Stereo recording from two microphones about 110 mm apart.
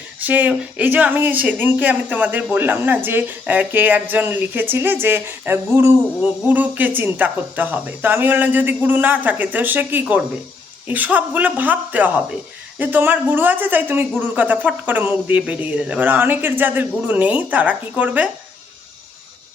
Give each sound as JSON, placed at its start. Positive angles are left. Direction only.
{"t": 0.2, "sound": "speech", "side_deg": -15}